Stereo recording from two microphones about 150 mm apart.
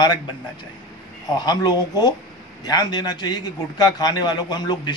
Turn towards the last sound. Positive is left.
turn(degrees=30)  # may be behind; listen again after turning